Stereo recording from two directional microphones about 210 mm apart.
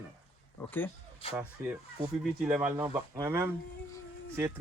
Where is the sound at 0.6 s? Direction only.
10° left (ahead or behind).